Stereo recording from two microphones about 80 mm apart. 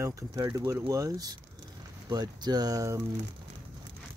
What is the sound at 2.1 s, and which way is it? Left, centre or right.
Speech, right.